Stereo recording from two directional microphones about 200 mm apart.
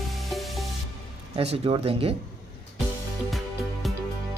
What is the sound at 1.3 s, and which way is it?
Speech, 30° right (ahead or behind).